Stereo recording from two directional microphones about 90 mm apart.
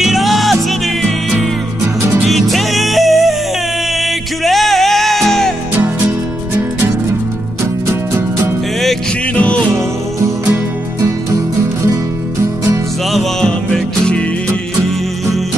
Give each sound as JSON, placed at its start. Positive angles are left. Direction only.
{"t": 0.0, "sound": "music", "side_deg": 0}
{"t": 2.0, "sound": "music", "side_deg": -25}
{"t": 2.2, "sound": "music", "side_deg": 0}
{"t": 7.8, "sound": "music", "side_deg": -30}
{"t": 9.3, "sound": "music", "side_deg": 15}
{"t": 10.5, "sound": "music", "side_deg": -35}
{"t": 13.1, "sound": "music", "side_deg": 5}